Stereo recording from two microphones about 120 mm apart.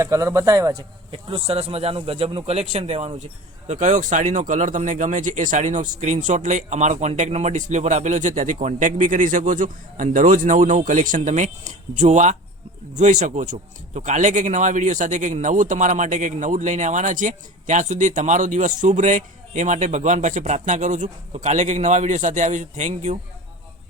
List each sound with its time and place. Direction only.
0.0 s a man's voice: 30° right (ahead or behind); by 3.2 s 75° right (ahead or behind)
3.7 s speech: 90° right
13.0 s speech: 90° right